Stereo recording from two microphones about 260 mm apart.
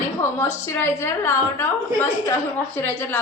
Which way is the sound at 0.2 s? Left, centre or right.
Centre.